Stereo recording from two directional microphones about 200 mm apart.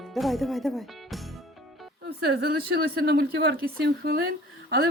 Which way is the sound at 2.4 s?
50° right (ahead or behind).